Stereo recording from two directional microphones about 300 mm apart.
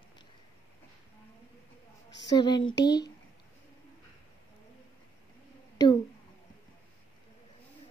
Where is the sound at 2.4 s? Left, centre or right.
Centre.